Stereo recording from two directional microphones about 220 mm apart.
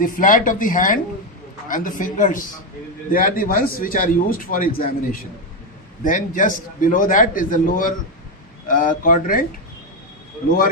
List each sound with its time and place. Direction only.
0.0 s a man's voice: 35° left (ahead or behind)